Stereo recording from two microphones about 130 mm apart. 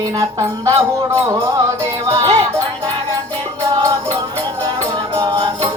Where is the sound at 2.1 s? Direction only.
25° right (ahead or behind).